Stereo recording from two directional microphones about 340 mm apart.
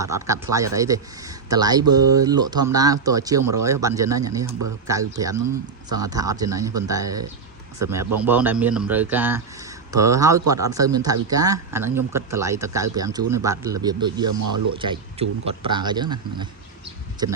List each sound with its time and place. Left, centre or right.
0.0 s a man's voice: centre
14.3 s speech: right
14.8 s speech: centre